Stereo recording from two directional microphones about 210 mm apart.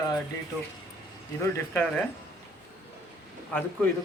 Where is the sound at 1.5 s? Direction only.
10° left (ahead or behind).